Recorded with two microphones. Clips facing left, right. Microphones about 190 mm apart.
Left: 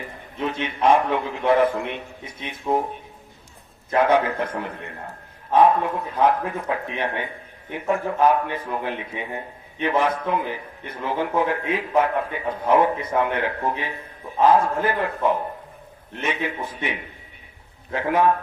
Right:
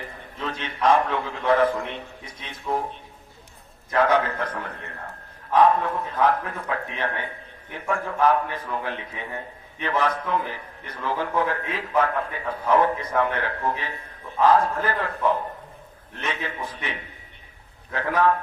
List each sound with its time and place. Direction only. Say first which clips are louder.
0.3 s a man's voice: left 5 dB; 10° left (ahead or behind)
4.0 s a man's voice: left 2 dB; 15° left (ahead or behind)